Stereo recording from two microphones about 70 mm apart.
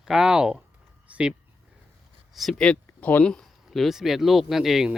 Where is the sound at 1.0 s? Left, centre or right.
Centre.